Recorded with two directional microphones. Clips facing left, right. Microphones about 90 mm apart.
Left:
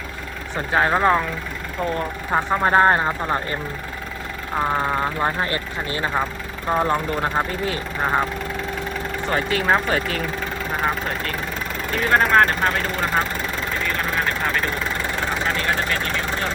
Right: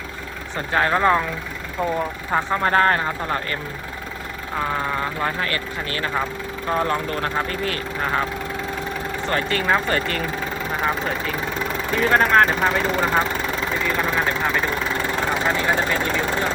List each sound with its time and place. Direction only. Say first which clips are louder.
0.5 s speech: left 1 dB; 5° left (ahead or behind)
2.3 s speech: left 2 dB; 10° left (ahead or behind)
9.3 s speech: left 1 dB; 5° left (ahead or behind)
13.9 s vehicle: right 2 dB; 10° right (ahead or behind)